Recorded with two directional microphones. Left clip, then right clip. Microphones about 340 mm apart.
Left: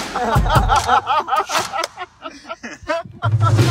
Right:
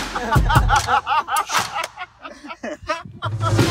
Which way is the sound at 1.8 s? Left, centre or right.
Left.